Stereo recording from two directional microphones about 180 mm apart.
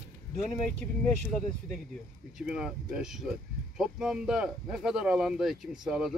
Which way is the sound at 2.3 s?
5° right (ahead or behind).